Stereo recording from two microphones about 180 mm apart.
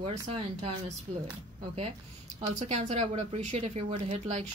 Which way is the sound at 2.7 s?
40° right (ahead or behind).